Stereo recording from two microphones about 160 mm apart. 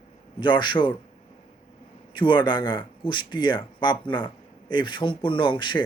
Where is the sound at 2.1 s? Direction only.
30° left (ahead or behind).